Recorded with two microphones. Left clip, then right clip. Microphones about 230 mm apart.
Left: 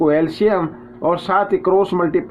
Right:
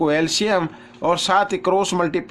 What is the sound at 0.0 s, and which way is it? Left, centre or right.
Speech, right.